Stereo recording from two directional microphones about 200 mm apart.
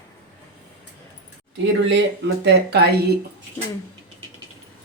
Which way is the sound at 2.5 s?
55° right (ahead or behind).